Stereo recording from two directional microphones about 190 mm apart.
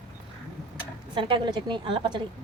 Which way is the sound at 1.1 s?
25° right (ahead or behind).